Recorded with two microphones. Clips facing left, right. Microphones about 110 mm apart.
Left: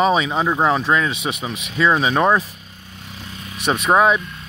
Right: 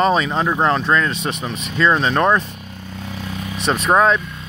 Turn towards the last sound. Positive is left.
turn(degrees=5)  # may be behind; listen again after turning